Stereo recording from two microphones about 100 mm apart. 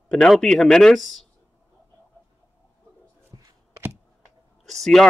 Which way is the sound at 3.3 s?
35° right (ahead or behind).